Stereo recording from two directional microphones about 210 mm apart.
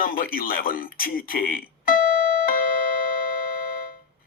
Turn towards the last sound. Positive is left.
turn(degrees=40)  # may be behind; listen again after turning